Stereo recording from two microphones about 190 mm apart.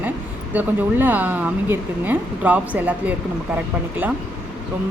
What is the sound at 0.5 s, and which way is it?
Speech, 10° right (ahead or behind).